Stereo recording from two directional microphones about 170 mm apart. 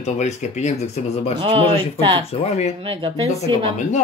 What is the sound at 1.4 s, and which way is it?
Speech, 30° right (ahead or behind).